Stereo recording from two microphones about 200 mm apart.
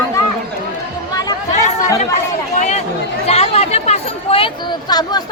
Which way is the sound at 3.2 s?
30° left (ahead or behind).